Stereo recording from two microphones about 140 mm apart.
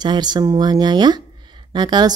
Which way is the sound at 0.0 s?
30° right (ahead or behind).